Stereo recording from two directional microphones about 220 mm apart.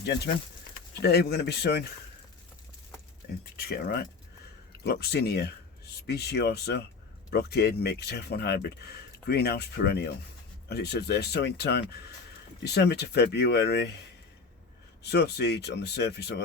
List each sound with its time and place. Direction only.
1.0 s speech: 45° left (ahead or behind)
3.6 s speech: 45° left (ahead or behind)
15.0 s speech: 50° left (ahead or behind)